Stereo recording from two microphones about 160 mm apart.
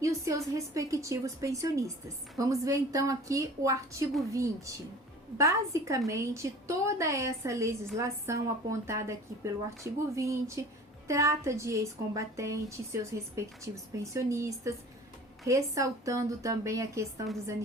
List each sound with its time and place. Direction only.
0.0 s speech: 20° right (ahead or behind)